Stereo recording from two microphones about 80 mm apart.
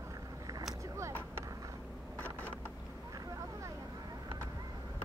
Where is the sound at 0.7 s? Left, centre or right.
Right.